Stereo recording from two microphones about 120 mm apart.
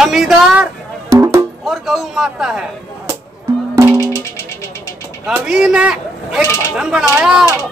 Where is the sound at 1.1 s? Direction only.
25° right (ahead or behind).